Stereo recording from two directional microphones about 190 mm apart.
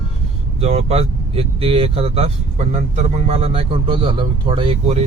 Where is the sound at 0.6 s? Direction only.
30° right (ahead or behind).